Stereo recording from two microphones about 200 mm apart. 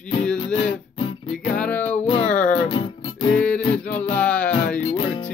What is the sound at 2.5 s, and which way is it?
Music, 30° left (ahead or behind).